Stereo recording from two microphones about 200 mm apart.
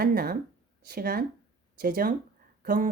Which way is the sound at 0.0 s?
50° right (ahead or behind).